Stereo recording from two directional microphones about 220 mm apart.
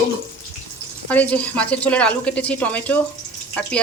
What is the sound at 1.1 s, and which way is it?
A woman's voice, 5° left (ahead or behind).